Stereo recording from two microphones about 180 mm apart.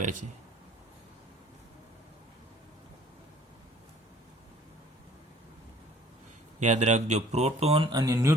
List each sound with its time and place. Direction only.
6.6 s speech: 40° right (ahead or behind); by 8.4 s 15° right (ahead or behind)